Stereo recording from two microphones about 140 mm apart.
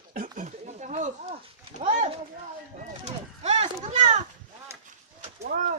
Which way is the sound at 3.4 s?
50° right (ahead or behind).